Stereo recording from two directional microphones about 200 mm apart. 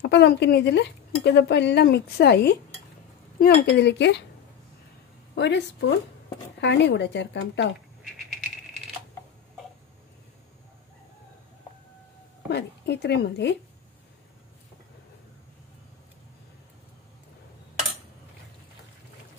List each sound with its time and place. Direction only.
0.0 s speech: 60° left (ahead or behind)
5.3 s speech: 60° left (ahead or behind)
12.4 s speech: 55° left (ahead or behind)